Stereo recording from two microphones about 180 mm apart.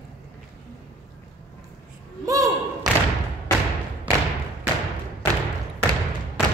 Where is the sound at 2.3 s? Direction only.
20° right (ahead or behind).